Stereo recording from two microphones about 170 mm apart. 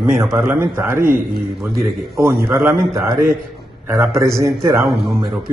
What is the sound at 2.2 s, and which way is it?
Speech, 15° right (ahead or behind).